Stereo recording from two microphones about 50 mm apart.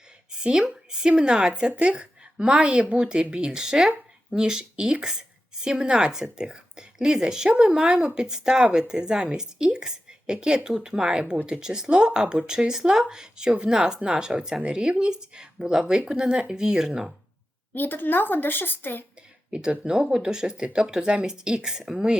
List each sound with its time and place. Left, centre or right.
0.3 s a sound: centre
0.9 s a woman's voice: centre
17.7 s a woman's voice: left
19.5 s a woman's voice: right